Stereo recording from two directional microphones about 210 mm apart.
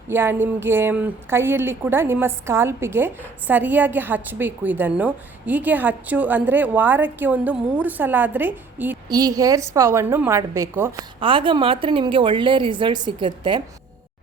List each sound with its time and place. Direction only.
0.1 s a woman's voice: 10° right (ahead or behind)
11.2 s a woman's voice: 25° right (ahead or behind)